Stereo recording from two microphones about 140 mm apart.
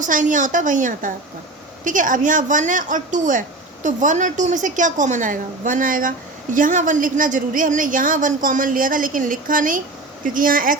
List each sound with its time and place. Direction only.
0.0 s a woman's voice: 65° right (ahead or behind)